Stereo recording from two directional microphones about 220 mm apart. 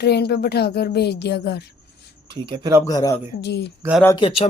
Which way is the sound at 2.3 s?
20° right (ahead or behind).